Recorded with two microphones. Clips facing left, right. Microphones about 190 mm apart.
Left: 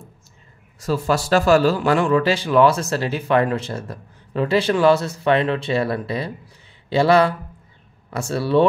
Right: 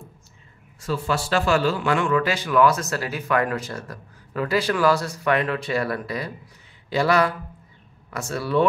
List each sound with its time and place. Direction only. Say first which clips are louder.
0.7 s a man's voice: left 4 dB; 40° left (ahead or behind)